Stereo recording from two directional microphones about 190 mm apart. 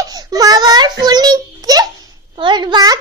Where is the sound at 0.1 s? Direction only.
20° right (ahead or behind).